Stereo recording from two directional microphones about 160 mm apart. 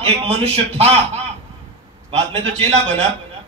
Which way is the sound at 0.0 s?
40° right (ahead or behind).